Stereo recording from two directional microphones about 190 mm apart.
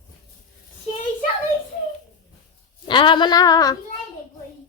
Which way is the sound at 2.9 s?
25° left (ahead or behind).